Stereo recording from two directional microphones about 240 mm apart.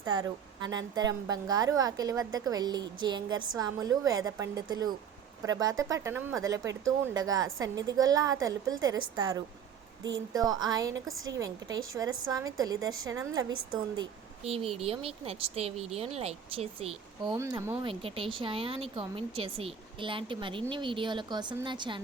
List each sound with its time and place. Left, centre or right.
0.0 s a woman's voice: centre